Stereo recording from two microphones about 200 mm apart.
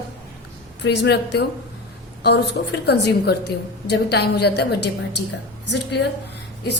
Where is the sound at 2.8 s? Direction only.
55° left (ahead or behind).